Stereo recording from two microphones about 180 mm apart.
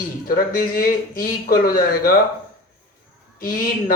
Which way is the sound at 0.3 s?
55° left (ahead or behind).